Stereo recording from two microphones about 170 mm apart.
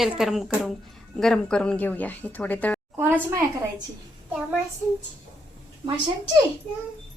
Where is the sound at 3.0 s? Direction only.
15° right (ahead or behind).